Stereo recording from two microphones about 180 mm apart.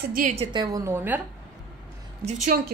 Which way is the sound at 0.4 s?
25° right (ahead or behind).